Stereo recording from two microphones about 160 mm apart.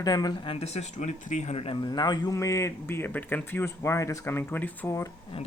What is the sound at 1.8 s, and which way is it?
Speech, 25° left (ahead or behind).